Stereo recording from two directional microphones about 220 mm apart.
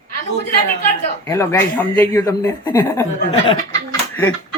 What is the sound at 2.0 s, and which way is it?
Speech, 10° left (ahead or behind).